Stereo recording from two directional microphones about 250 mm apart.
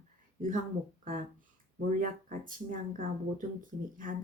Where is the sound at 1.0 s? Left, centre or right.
Right.